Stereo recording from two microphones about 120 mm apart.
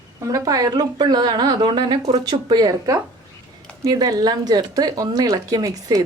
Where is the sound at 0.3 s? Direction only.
30° right (ahead or behind).